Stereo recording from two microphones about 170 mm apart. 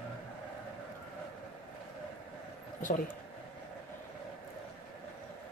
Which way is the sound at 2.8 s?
50° left (ahead or behind).